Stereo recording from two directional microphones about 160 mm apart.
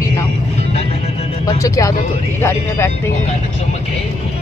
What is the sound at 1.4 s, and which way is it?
Speech, 25° left (ahead or behind).